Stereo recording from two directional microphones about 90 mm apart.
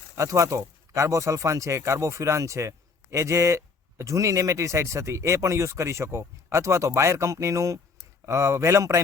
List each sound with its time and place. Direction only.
0.2 s speech: 35° right (ahead or behind)